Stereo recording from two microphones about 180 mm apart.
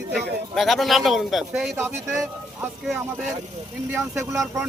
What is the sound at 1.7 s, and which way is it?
Speech, 10° right (ahead or behind).